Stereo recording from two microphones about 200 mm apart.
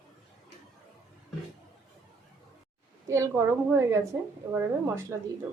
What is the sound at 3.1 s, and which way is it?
A woman's voice, 15° right (ahead or behind).